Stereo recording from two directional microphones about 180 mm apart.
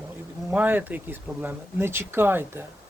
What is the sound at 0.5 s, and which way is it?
Speech, 10° right (ahead or behind).